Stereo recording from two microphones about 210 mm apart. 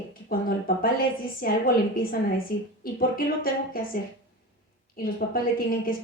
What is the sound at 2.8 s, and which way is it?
A woman's voice, 45° left (ahead or behind).